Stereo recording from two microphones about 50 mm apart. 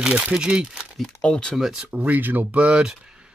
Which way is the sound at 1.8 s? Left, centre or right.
Right.